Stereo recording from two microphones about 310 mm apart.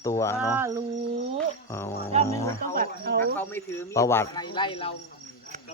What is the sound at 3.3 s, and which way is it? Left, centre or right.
Speech, centre.